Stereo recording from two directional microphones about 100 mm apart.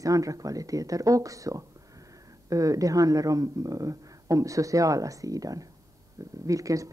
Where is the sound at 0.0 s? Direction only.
35° right (ahead or behind).